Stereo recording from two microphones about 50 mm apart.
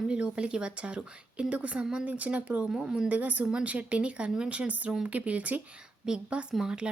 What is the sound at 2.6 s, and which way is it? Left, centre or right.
Speech, centre.